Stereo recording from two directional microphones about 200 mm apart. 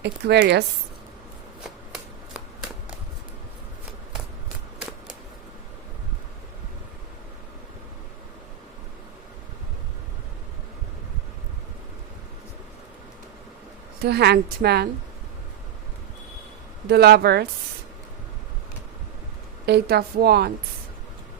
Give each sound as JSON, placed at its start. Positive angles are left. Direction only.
{"t": 0.0, "sound": "a woman's voice", "side_deg": -55}
{"t": 14.0, "sound": "a woman's voice", "side_deg": -55}
{"t": 16.9, "sound": "a woman's voice", "side_deg": -55}
{"t": 19.6, "sound": "a woman's voice", "side_deg": -55}